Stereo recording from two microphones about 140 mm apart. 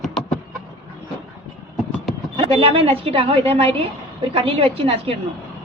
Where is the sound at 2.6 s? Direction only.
40° right (ahead or behind).